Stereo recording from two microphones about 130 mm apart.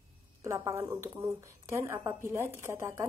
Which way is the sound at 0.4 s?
20° right (ahead or behind).